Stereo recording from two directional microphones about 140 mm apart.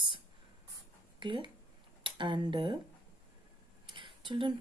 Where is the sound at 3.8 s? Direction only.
35° right (ahead or behind).